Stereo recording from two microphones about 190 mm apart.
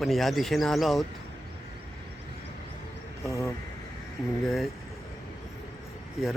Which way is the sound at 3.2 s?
15° left (ahead or behind).